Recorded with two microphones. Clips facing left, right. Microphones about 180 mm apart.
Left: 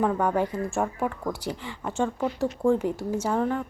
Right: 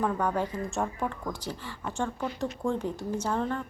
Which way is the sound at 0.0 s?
15° left (ahead or behind).